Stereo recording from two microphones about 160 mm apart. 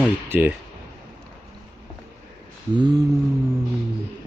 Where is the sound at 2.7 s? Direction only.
25° right (ahead or behind).